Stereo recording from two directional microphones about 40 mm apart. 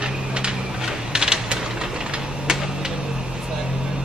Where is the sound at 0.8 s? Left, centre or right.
Centre.